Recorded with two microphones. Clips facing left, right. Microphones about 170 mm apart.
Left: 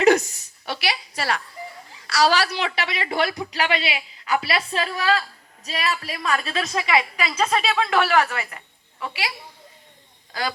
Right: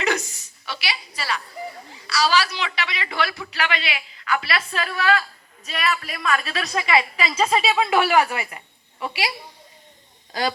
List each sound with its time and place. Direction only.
0.0 s a woman's voice: 50° left (ahead or behind)
3.2 s speech: 20° left (ahead or behind)
3.6 s a woman's voice: 35° left (ahead or behind)
6.9 s a woman's voice: centre (ahead or behind)